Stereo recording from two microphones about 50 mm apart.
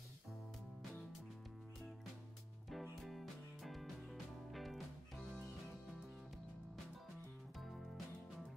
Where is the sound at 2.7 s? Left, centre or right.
Centre.